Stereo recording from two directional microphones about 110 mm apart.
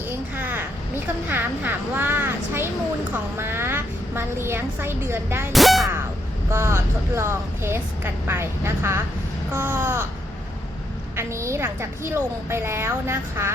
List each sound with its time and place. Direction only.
0.3 s a woman's voice: 20° right (ahead or behind)
5.5 s music: centre (ahead or behind)
6.5 s a woman's voice: 25° right (ahead or behind)
11.2 s a woman's voice: 25° right (ahead or behind)